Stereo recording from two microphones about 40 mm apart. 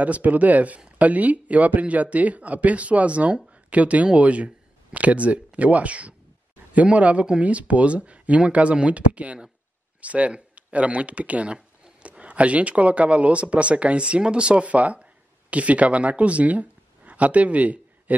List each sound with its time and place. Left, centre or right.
0.0 s speech: right